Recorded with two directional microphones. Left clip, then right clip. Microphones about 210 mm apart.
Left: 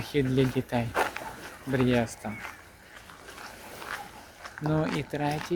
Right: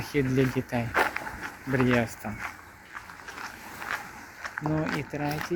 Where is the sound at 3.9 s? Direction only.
30° right (ahead or behind).